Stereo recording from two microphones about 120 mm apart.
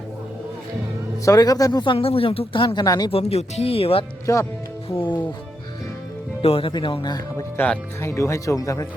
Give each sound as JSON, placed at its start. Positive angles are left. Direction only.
{"t": 1.2, "sound": "speech", "side_deg": 30}
{"t": 1.8, "sound": "speech", "side_deg": 45}
{"t": 2.8, "sound": "speech", "side_deg": 30}
{"t": 3.1, "sound": "speech", "side_deg": 55}
{"t": 4.3, "sound": "speech", "side_deg": 30}
{"t": 4.9, "sound": "speech", "side_deg": 40}
{"t": 6.4, "sound": "speech", "side_deg": 50}
{"t": 7.5, "sound": "speech", "side_deg": 10}
{"t": 8.0, "sound": "speech", "side_deg": 25}